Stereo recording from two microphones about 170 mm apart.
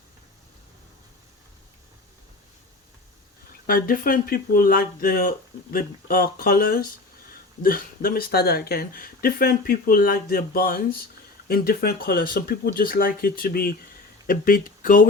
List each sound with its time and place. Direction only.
3.7 s speech: 55° left (ahead or behind)